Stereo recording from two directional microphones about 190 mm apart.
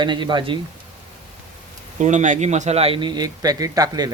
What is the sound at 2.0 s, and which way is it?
Speech, 40° right (ahead or behind).